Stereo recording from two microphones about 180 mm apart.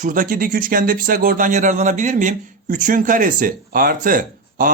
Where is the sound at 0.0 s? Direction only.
50° right (ahead or behind).